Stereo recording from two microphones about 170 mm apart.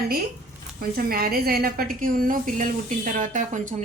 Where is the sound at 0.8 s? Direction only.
60° right (ahead or behind).